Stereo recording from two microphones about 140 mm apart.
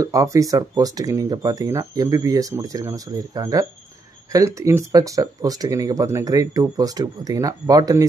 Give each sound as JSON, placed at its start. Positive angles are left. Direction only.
{"t": 0.0, "sound": "speech", "side_deg": -25}